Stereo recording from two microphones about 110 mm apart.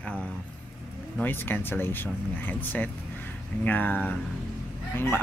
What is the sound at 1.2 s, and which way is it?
A man's voice, 20° left (ahead or behind).